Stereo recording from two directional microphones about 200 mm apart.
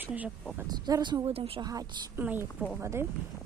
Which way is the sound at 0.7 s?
20° right (ahead or behind).